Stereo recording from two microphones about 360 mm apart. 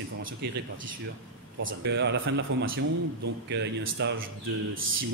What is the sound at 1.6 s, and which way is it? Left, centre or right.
Speech, right.